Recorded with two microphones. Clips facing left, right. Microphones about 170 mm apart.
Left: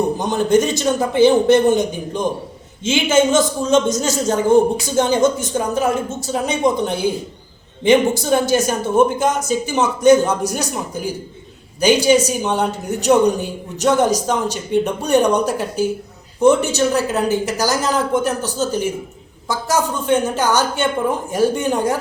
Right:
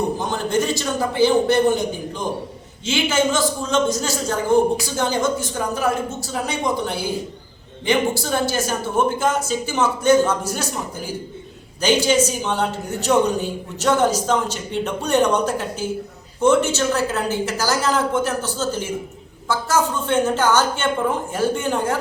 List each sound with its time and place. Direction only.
0.2 s a woman's voice: 20° left (ahead or behind)